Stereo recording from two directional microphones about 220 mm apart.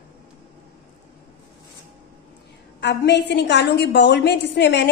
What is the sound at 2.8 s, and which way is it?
A woman's voice, 50° left (ahead or behind).